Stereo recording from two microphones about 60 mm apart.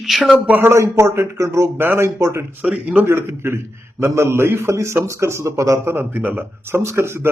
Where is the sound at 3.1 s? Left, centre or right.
Right.